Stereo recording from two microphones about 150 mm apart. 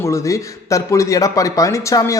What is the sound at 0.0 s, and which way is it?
A man's voice, 20° left (ahead or behind).